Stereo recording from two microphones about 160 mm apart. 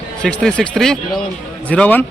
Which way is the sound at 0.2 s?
5° left (ahead or behind).